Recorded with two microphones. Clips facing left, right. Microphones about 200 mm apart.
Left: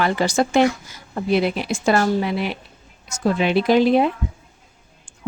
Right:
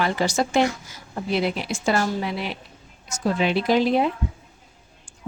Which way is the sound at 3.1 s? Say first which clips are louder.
Left 3 dB; 60° left (ahead or behind).